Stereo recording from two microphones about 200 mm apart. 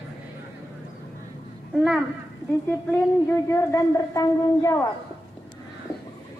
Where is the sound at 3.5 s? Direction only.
15° left (ahead or behind).